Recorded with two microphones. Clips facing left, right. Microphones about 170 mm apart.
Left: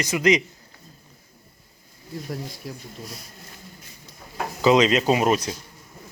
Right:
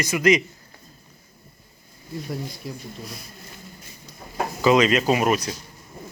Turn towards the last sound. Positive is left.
turn(degrees=25)  # may be behind; listen again after turning